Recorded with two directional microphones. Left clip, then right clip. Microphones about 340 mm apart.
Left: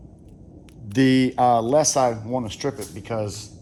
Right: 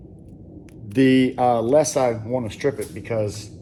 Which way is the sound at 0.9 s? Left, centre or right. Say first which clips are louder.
Right 2 dB; left.